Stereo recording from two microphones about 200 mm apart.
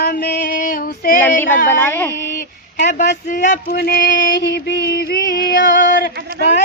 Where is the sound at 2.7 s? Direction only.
40° left (ahead or behind).